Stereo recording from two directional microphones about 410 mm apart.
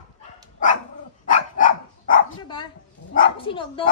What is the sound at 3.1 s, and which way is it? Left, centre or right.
Speech, centre.